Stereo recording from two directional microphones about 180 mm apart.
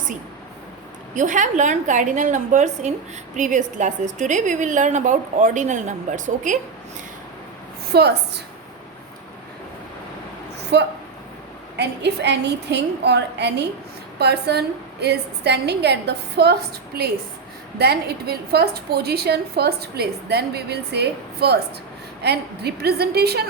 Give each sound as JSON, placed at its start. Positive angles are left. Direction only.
{"t": 1.1, "sound": "a woman's voice", "side_deg": -45}
{"t": 7.9, "sound": "a woman's voice", "side_deg": -65}
{"t": 10.7, "sound": "a woman's voice", "side_deg": -70}